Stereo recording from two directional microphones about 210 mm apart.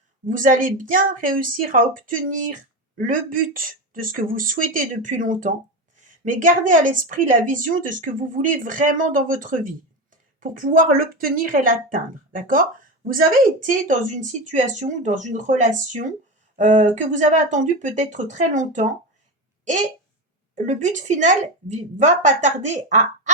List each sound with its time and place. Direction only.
0.3 s a woman's voice: 40° right (ahead or behind)
20.7 s a woman's voice: 35° right (ahead or behind)